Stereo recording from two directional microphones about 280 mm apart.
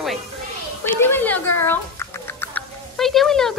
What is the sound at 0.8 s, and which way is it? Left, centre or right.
Rodents, centre.